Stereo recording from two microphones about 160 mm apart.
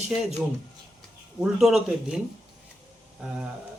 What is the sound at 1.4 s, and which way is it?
Speech, 5° right (ahead or behind).